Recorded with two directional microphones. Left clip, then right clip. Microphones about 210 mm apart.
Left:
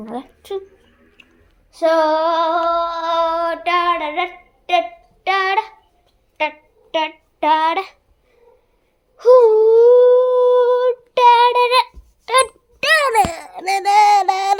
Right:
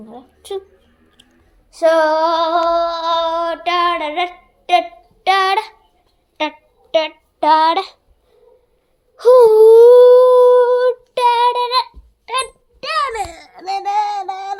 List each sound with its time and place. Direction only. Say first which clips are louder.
0.4 s a woman's voice: right 2 dB; centre (ahead or behind)
1.7 s female singing: right 2 dB; 10° right (ahead or behind)
6.4 s a child's voice: even; 15° right (ahead or behind)
6.9 s child singing: right 4 dB; 15° right (ahead or behind)
9.1 s whimper: right 2 dB; 20° right (ahead or behind)
10.5 s a sound: right 2 dB; centre (ahead or behind)
11.1 s child singing: left 5 dB; 15° left (ahead or behind)
11.7 s a sound: left 2 dB; 25° left (ahead or behind)
13.3 s a sound: left 7 dB; 5° right (ahead or behind)
13.6 s speech: left 5 dB; 10° left (ahead or behind)
14.1 s child singing: left 9 dB; 35° left (ahead or behind)